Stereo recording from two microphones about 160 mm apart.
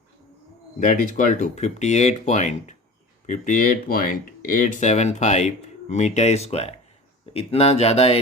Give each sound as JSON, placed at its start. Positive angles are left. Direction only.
{"t": 0.8, "sound": "speech", "side_deg": 55}